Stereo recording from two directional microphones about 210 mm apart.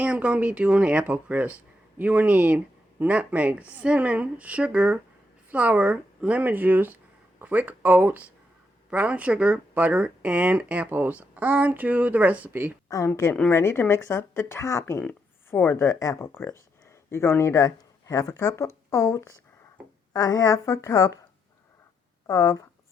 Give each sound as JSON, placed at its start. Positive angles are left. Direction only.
{"t": 0.0, "sound": "speech", "side_deg": -5}
{"t": 12.9, "sound": "a woman's voice", "side_deg": 15}
{"t": 22.3, "sound": "a woman's voice", "side_deg": 15}